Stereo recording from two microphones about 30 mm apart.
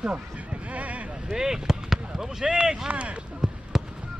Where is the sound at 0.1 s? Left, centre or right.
Right.